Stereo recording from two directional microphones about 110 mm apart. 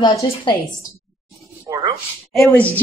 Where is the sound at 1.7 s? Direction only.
35° right (ahead or behind).